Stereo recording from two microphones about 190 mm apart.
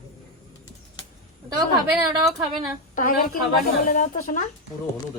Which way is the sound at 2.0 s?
25° right (ahead or behind).